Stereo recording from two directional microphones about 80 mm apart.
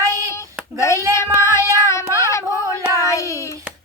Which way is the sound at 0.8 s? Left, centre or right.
Left.